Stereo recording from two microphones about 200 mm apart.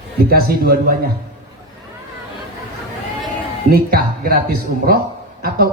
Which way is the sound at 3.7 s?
50° right (ahead or behind).